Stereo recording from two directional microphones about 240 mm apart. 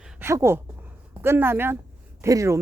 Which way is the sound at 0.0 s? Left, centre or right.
Centre.